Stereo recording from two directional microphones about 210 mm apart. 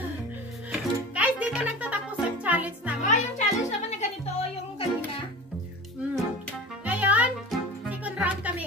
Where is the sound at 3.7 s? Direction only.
35° left (ahead or behind).